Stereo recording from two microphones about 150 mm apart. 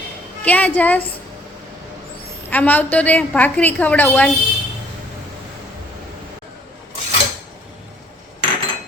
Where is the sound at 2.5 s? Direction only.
10° left (ahead or behind).